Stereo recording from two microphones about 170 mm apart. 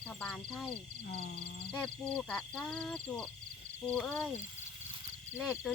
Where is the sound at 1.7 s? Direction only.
5° left (ahead or behind).